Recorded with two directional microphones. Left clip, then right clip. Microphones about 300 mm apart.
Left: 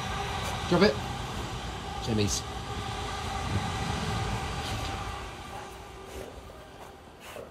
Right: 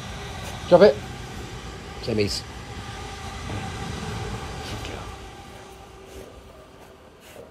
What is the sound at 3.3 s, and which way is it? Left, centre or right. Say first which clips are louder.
Train: left 1 dB; centre.